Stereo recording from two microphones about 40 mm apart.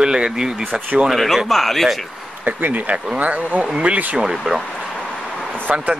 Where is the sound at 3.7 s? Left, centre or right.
Right.